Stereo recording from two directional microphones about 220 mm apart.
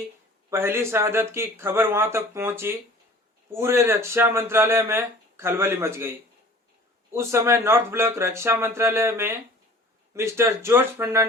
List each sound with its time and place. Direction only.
0.5 s speech: 10° right (ahead or behind)
7.1 s speech: 10° right (ahead or behind)